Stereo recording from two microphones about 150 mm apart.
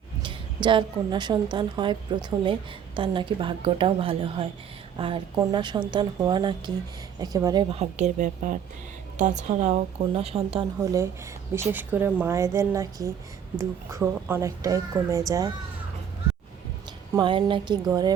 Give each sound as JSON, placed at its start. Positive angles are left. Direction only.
{"t": 0.2, "sound": "a woman's voice", "side_deg": -35}
{"t": 7.8, "sound": "a woman's voice", "side_deg": -50}
{"t": 10.8, "sound": "a woman's voice", "side_deg": -20}
{"t": 17.2, "sound": "a woman's voice", "side_deg": -35}